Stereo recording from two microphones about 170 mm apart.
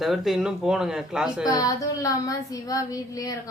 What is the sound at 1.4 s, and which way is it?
Speech, 20° left (ahead or behind).